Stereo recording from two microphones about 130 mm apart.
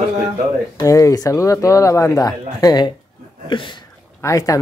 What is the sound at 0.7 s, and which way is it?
Speech, 25° left (ahead or behind).